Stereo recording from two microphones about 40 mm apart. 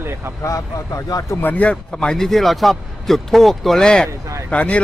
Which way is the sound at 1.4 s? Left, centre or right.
Left.